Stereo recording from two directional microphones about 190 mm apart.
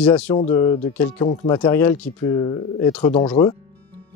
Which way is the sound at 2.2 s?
20° left (ahead or behind).